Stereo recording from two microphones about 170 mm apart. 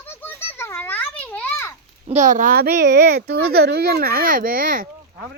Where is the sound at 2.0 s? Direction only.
45° right (ahead or behind).